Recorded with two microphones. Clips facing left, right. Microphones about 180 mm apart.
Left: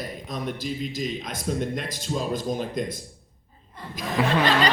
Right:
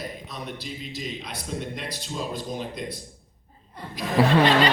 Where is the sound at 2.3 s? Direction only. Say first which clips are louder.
Left 5 dB; 45° left (ahead or behind).